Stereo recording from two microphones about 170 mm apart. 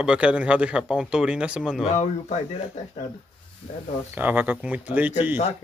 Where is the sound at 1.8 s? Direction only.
40° left (ahead or behind).